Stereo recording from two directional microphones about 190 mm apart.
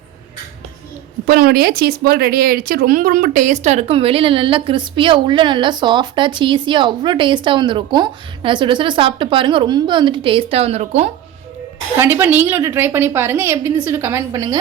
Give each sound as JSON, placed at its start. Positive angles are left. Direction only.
{"t": 1.3, "sound": "speech", "side_deg": -55}
{"t": 11.9, "sound": "a woman's voice", "side_deg": -10}